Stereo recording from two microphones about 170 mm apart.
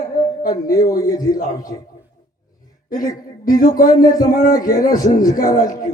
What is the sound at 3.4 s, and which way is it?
Speech, 55° left (ahead or behind).